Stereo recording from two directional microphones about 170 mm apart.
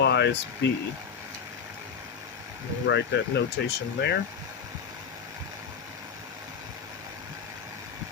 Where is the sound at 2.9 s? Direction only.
90° left.